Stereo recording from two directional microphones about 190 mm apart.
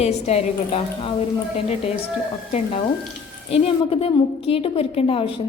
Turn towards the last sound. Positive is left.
turn(degrees=30)  # may be behind; listen again after turning